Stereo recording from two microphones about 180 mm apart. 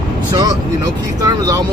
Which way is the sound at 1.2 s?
20° right (ahead or behind).